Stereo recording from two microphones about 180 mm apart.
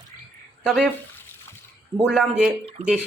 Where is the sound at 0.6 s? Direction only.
Centre (ahead or behind).